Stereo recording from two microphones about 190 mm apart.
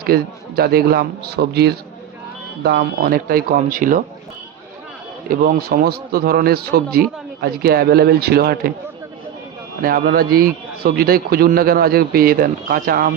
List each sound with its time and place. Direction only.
0.0 s a man's voice: 55° right (ahead or behind)
5.3 s a man's voice: 50° right (ahead or behind)
9.8 s a man's voice: 50° right (ahead or behind)